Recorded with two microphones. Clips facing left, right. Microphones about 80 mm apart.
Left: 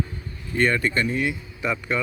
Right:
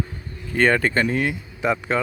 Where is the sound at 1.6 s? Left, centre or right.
Right.